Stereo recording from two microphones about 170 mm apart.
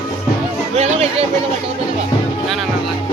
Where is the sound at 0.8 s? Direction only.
35° right (ahead or behind).